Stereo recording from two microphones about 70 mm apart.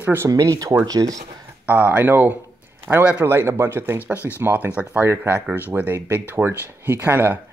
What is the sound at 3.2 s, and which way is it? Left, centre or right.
Speech, right.